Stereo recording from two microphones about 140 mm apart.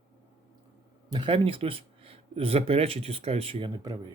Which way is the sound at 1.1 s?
35° right (ahead or behind).